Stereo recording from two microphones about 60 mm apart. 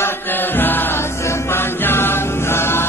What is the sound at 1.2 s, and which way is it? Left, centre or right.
Music, left.